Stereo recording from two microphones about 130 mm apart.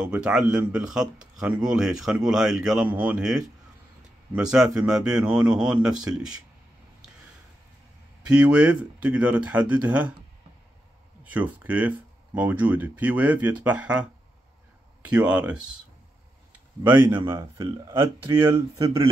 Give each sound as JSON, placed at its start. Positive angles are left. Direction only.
{"t": 0.0, "sound": "speech", "side_deg": -5}
{"t": 8.4, "sound": "speech", "side_deg": -10}
{"t": 11.2, "sound": "speech", "side_deg": -10}
{"t": 17.3, "sound": "speech", "side_deg": -20}